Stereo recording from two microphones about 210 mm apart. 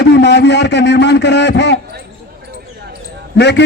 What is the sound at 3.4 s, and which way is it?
Speech, 55° left (ahead or behind).